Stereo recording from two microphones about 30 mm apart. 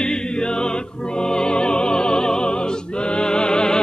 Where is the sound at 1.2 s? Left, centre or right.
Left.